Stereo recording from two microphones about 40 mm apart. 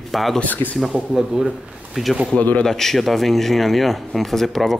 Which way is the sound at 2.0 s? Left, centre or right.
Centre.